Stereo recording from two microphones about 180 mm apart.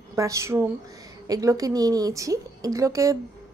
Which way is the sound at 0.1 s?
15° right (ahead or behind).